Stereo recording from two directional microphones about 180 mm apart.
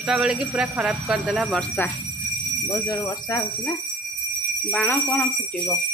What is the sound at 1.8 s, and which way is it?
Speech, 10° left (ahead or behind).